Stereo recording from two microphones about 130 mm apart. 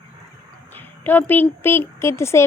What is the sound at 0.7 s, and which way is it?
Speech, 15° left (ahead or behind).